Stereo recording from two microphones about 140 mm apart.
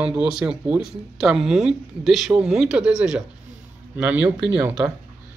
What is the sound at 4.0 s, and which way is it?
Speech, 15° right (ahead or behind).